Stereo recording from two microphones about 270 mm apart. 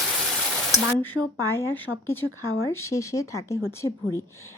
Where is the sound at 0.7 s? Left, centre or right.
Centre.